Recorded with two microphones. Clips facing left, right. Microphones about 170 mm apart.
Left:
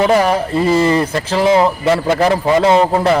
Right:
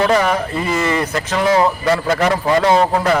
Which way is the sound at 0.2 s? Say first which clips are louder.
Left 4 dB; 30° left (ahead or behind).